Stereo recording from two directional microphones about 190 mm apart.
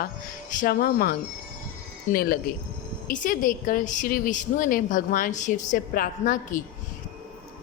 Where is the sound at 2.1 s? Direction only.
50° left (ahead or behind).